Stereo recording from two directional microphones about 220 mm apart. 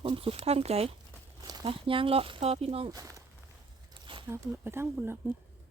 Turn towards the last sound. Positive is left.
turn(degrees=-10)  # may be behind; listen again after turning